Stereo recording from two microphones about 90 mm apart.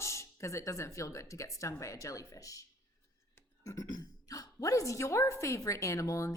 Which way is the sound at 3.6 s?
30° left (ahead or behind).